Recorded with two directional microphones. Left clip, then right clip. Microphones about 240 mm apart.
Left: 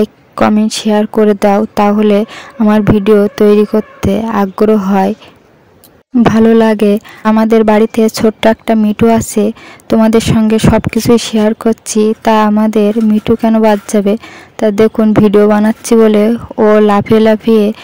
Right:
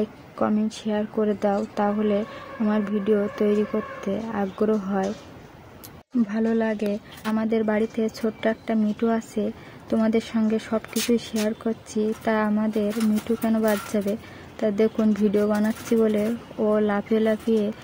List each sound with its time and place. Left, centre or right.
0.0 s speech: left
6.3 s speech: left